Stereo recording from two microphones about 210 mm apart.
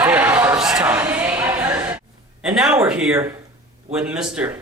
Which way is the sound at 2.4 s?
Centre (ahead or behind).